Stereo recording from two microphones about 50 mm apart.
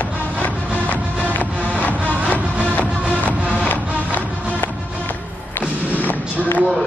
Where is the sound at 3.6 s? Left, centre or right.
Left.